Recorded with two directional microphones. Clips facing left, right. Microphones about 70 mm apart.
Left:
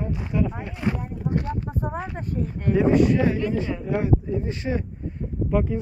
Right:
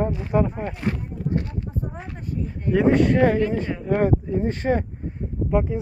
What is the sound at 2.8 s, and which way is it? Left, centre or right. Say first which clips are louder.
Speech: right 2 dB; right.